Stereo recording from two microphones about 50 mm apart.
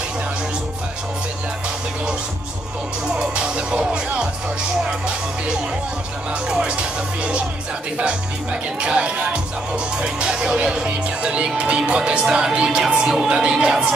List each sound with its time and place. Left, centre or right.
3.1 s music: centre
4.8 s speech: centre
8.8 s speech: centre